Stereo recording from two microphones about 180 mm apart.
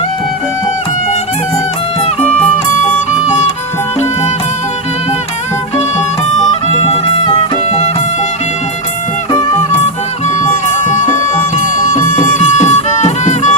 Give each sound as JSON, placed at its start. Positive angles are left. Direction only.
{"t": 6.7, "sound": "music", "side_deg": 35}
{"t": 10.8, "sound": "music", "side_deg": 40}